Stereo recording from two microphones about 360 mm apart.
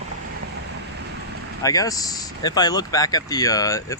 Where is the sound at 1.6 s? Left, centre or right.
Centre.